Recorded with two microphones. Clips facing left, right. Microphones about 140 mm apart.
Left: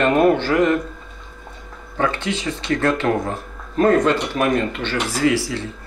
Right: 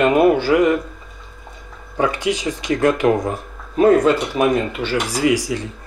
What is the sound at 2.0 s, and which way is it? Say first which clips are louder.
Speech: right 3 dB; 15° right (ahead or behind).